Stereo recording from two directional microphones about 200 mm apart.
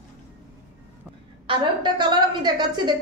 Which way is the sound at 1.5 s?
20° right (ahead or behind).